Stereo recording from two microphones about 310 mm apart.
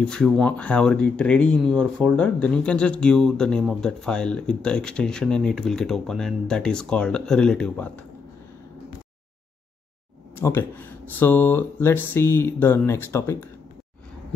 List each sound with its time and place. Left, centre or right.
0.0 s speech: centre
10.3 s speech: centre